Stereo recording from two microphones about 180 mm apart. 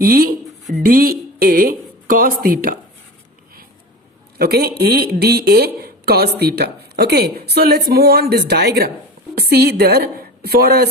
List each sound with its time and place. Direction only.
0.0 s a woman's voice: 55° right (ahead or behind)
4.4 s a woman's voice: 60° right (ahead or behind)